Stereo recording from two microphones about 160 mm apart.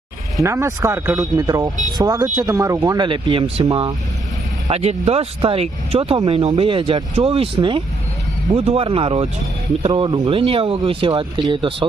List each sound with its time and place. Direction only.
0.4 s speech: 15° right (ahead or behind)
4.7 s speech: 40° right (ahead or behind)